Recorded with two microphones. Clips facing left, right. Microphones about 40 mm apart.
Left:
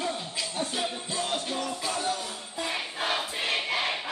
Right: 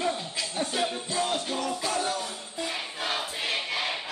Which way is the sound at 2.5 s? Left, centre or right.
Centre.